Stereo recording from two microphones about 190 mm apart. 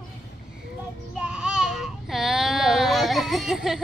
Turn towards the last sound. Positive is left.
turn(degrees=0)  # may be behind; listen again after turning